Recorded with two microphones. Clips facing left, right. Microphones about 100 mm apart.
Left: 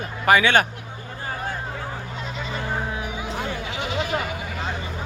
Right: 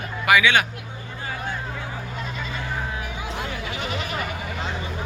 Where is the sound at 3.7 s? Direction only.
20° left (ahead or behind).